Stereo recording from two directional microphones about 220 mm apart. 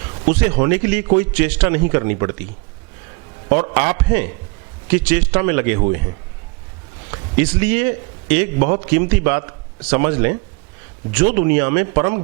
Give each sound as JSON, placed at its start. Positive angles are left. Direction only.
{"t": 0.3, "sound": "a man's voice", "side_deg": -15}
{"t": 3.5, "sound": "a man's voice", "side_deg": -15}